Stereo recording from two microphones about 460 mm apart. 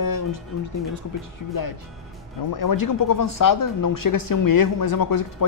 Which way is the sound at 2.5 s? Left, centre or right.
Left.